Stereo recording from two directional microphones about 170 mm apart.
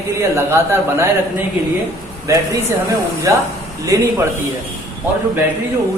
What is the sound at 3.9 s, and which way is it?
Speech, 20° right (ahead or behind).